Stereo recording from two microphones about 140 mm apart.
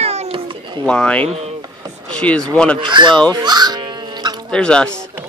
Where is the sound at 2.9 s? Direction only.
35° right (ahead or behind).